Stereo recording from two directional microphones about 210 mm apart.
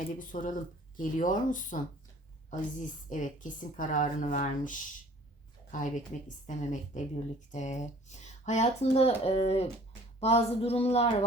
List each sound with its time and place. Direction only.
0.2 s speech: 40° left (ahead or behind)